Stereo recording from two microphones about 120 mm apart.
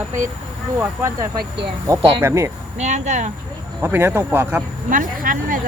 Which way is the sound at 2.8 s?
75° right (ahead or behind).